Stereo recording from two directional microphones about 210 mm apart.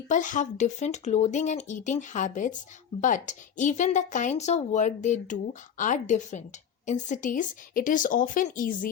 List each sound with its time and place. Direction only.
0.1 s speech: 35° left (ahead or behind)